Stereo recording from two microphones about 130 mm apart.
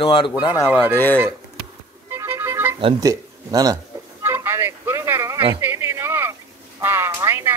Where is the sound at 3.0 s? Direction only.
25° right (ahead or behind).